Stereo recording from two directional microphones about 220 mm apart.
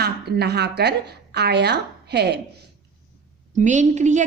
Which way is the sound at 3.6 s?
35° right (ahead or behind).